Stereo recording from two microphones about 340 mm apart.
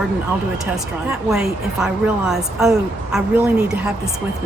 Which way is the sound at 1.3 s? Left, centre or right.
Centre.